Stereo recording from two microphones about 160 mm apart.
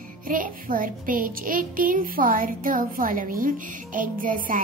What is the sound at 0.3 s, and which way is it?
Music, 60° right (ahead or behind).